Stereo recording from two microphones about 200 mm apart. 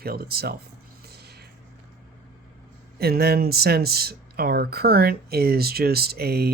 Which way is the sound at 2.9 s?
50° right (ahead or behind).